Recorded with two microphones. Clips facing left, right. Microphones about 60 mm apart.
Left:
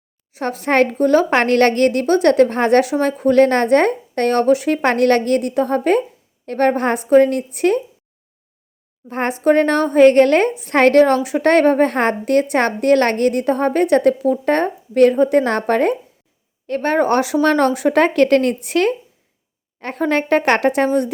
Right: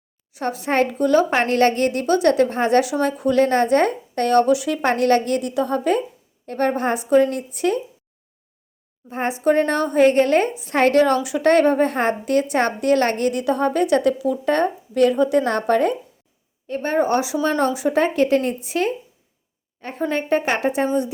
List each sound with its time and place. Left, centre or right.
0.3 s a woman's voice: left
1.4 s a woman's voice: left
9.0 s a woman's voice: left
16.6 s a woman's voice: left